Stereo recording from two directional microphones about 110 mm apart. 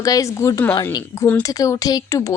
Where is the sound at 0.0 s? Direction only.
30° left (ahead or behind).